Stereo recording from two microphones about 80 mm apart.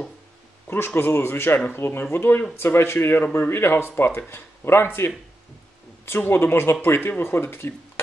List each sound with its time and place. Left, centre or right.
0.7 s speech: left